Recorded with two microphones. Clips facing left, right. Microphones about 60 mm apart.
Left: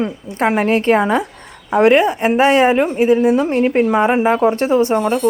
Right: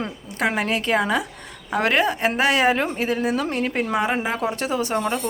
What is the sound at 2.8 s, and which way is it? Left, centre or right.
A woman's voice, centre.